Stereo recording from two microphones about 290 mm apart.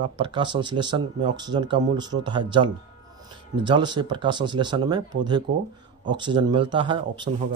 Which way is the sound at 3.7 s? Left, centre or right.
Centre.